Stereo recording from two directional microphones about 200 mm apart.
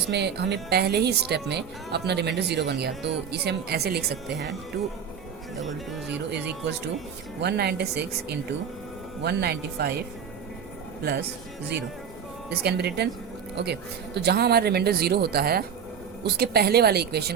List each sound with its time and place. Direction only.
0.1 s a woman's voice: 60° right (ahead or behind)
5.5 s speech: centre (ahead or behind)
7.4 s speech: 55° right (ahead or behind)
12.5 s speech: 55° right (ahead or behind)